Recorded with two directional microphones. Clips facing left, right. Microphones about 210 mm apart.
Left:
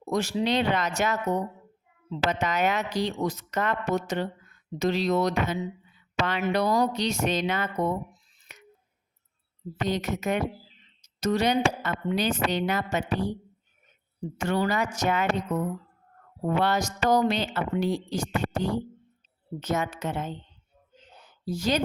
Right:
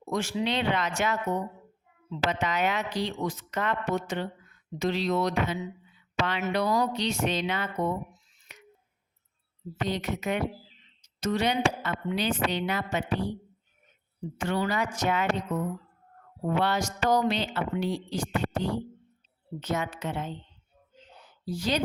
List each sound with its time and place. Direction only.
0.1 s speech: 40° left (ahead or behind)
9.8 s speech: 45° left (ahead or behind)
14.3 s speech: 45° left (ahead or behind)
16.5 s speech: 45° left (ahead or behind)
21.4 s speech: 45° left (ahead or behind)